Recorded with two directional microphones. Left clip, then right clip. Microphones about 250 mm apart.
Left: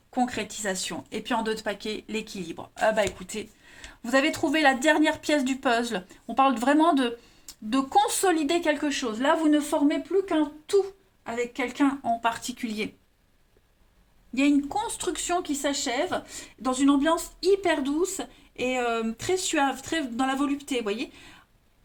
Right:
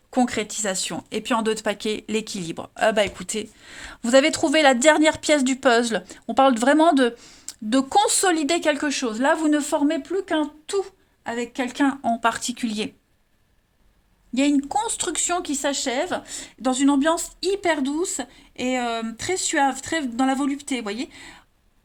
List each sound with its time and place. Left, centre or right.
0.1 s speech: right
14.3 s speech: right